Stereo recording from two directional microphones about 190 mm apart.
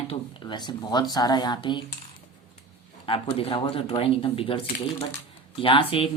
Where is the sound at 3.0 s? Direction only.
30° left (ahead or behind).